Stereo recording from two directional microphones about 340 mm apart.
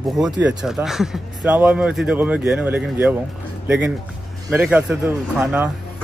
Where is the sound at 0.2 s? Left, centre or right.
Centre.